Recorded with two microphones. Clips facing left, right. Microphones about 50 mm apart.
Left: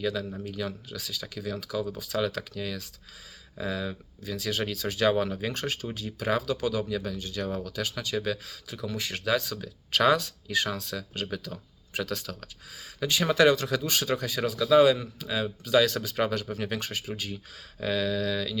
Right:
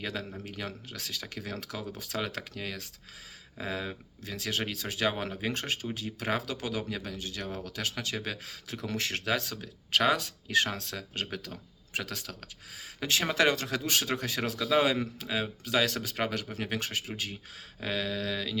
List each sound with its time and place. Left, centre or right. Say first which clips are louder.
0.0 s speech: left 6 dB; right
2.2 s speech: left 5 dB; right
5.5 s speech: left 1 dB; right
8.1 s speech: left 6 dB; right
8.7 s speech: even; right
9.2 s speech: left 4 dB; right